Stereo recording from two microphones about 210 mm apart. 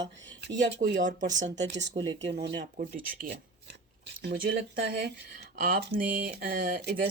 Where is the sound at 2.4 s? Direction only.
40° right (ahead or behind).